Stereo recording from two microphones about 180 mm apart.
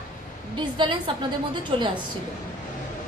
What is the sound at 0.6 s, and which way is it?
A woman's voice, 25° right (ahead or behind).